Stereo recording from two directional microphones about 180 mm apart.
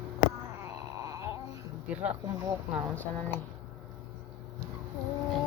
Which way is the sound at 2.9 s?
10° left (ahead or behind).